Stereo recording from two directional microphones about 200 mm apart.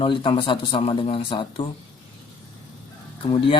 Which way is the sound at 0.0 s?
25° left (ahead or behind).